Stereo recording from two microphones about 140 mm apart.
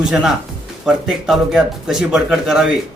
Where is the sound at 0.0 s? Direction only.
5° right (ahead or behind).